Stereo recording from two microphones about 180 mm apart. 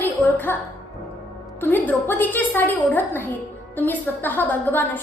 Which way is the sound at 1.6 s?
10° left (ahead or behind).